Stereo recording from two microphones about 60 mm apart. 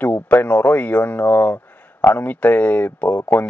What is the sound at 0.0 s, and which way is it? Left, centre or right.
Speech, left.